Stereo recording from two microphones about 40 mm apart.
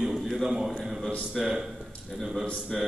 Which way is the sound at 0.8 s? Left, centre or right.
Centre.